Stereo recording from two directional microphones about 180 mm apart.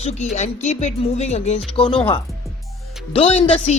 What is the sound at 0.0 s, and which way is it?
Speech, 40° left (ahead or behind).